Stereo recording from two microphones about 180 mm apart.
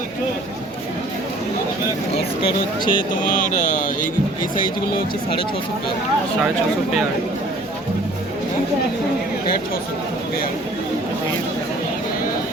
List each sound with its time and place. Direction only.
2.4 s speech: 25° left (ahead or behind)
3.3 s speech: 45° left (ahead or behind)